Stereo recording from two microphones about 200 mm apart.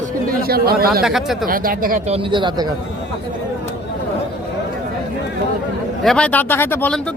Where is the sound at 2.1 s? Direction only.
25° right (ahead or behind).